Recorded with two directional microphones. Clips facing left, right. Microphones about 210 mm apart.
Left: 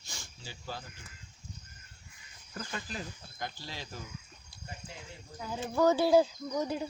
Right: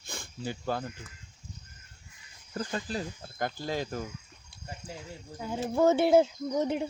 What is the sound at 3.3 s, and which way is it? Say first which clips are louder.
Speech: right 11 dB; 50° right (ahead or behind).